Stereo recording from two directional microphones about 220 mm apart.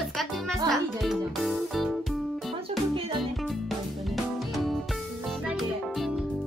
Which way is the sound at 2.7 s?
25° right (ahead or behind).